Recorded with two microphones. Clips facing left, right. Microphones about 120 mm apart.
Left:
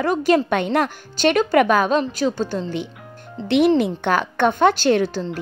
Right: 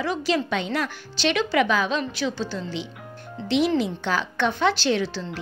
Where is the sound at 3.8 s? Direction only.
55° left (ahead or behind).